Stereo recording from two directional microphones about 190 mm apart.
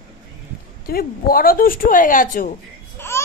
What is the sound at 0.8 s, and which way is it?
Speech, 50° left (ahead or behind).